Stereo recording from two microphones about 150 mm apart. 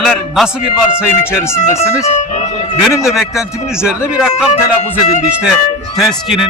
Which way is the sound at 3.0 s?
5° right (ahead or behind).